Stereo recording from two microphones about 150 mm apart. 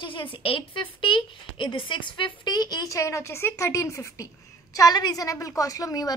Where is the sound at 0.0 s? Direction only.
35° left (ahead or behind).